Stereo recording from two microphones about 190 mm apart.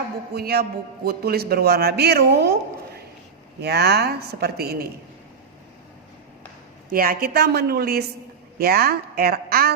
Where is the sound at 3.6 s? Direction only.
60° right (ahead or behind).